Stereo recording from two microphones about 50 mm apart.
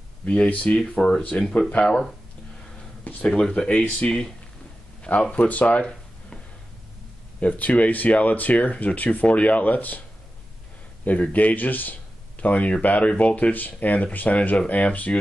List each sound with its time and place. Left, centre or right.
0.2 s speech: left; by 2.1 s centre
3.0 s a sound: left
3.3 s speech: centre
7.3 s speech: left
11.1 s speech: left